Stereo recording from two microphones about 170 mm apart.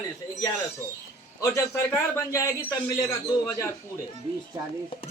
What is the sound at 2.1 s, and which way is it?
Speech, 20° left (ahead or behind).